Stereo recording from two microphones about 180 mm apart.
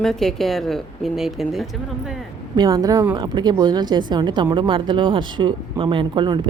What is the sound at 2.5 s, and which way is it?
Speech, 20° right (ahead or behind).